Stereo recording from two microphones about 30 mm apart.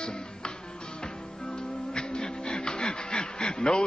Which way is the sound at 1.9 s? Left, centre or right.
Left.